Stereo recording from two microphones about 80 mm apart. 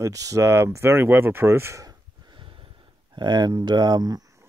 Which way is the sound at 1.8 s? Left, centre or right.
Right.